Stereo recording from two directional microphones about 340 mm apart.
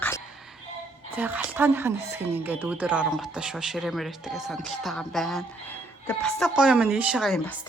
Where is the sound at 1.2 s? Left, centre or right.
Centre.